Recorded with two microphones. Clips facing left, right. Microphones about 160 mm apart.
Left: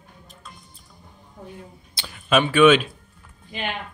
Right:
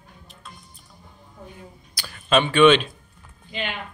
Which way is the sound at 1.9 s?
20° left (ahead or behind).